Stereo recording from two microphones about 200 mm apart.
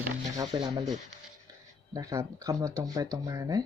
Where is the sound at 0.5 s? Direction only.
20° right (ahead or behind).